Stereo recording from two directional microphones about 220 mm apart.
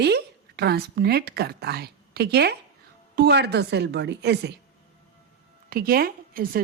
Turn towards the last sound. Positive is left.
turn(degrees=-40)  # may be behind; listen again after turning